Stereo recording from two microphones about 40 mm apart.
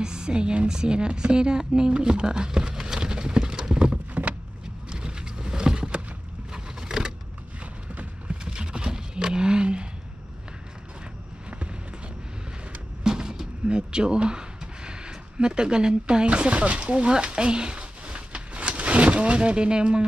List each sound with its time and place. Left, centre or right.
0.0 s a woman's voice: centre
4.1 s vehicle: right
4.8 s vehicle: right
7.9 s a sound: right
8.5 s wild animals: right
13.0 s a sound: centre